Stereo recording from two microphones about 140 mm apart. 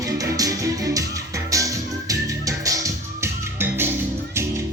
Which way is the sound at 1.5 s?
25° right (ahead or behind).